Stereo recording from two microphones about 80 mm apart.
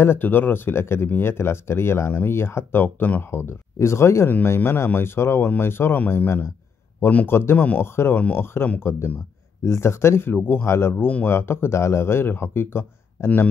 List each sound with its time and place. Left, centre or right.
0.0 s speech: left